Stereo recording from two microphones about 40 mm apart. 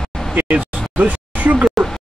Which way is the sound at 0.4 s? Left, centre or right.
Right.